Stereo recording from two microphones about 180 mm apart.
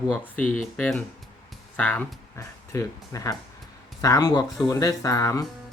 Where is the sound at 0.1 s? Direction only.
5° left (ahead or behind).